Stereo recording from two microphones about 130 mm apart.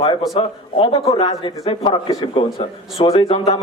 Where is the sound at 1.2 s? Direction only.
40° left (ahead or behind).